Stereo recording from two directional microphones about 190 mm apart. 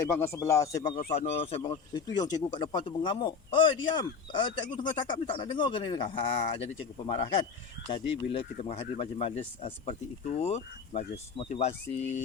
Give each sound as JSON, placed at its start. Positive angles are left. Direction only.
{"t": 0.0, "sound": "speech", "side_deg": 15}
{"t": 0.9, "sound": "speech", "side_deg": 35}